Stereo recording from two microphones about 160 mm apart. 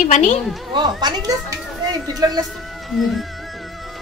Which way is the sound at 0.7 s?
30° right (ahead or behind).